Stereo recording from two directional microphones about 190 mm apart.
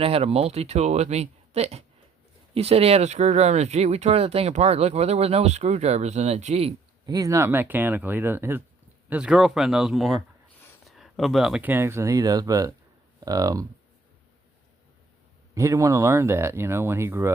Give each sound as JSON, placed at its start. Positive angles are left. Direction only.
{"t": 0.0, "sound": "speech", "side_deg": -30}
{"t": 15.5, "sound": "speech", "side_deg": -15}